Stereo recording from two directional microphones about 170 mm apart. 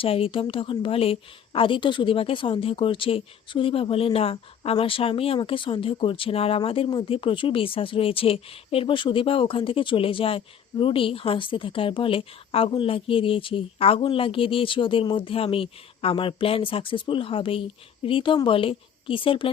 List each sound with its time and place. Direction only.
0.0 s a woman's voice: 35° left (ahead or behind)